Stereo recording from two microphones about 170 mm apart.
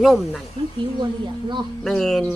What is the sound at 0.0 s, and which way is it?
Speech, centre (ahead or behind).